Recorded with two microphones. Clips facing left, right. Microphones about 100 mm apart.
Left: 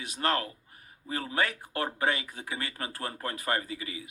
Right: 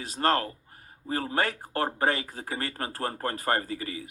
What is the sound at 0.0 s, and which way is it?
Speech, 35° right (ahead or behind).